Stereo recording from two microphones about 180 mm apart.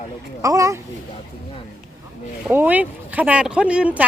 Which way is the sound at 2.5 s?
10° right (ahead or behind).